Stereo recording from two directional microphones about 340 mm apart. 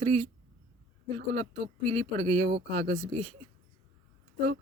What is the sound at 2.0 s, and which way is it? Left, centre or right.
Speech, centre.